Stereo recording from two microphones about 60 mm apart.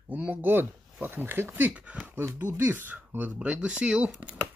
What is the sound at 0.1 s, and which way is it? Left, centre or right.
Speech, right.